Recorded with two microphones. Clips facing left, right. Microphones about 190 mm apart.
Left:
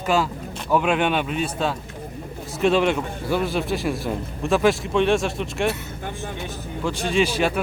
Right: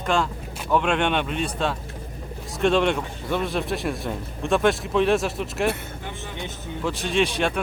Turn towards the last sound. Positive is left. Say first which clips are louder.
# left 2 dB
turn(degrees=5)  # may be behind; listen again after turning